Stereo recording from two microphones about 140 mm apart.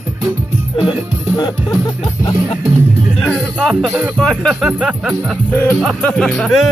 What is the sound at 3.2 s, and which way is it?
Music, centre (ahead or behind).